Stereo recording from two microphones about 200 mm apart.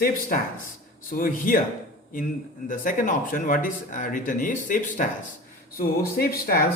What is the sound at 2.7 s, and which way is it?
Speech, 40° left (ahead or behind).